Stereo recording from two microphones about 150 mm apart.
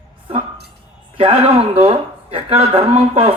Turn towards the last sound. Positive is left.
turn(degrees=-45)  # may be behind; listen again after turning